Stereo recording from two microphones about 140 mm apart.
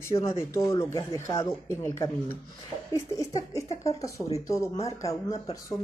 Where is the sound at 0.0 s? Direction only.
20° left (ahead or behind).